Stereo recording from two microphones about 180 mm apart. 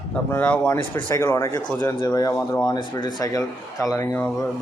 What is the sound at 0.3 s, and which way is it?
A man's voice, 10° left (ahead or behind).